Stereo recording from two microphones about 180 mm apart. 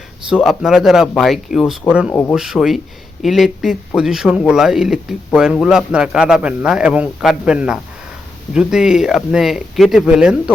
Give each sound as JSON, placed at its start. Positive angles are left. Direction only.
{"t": 0.3, "sound": "speech", "side_deg": 0}